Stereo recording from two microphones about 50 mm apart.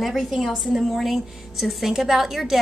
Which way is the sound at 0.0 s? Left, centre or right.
Centre.